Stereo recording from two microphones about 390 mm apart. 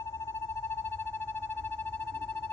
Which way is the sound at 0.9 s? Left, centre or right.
Right.